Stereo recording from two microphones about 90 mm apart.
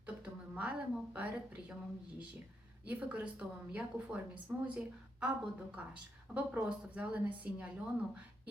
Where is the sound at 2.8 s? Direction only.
15° right (ahead or behind).